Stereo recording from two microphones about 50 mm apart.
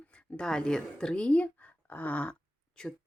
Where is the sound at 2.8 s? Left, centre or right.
Centre.